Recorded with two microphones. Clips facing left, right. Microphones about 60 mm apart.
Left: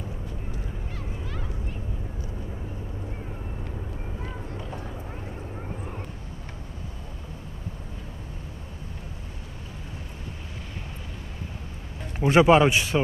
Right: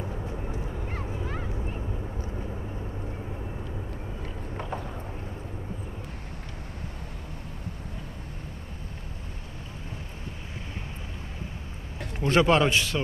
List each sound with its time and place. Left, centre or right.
0.5 s vehicle: right
12.2 s a man's voice: centre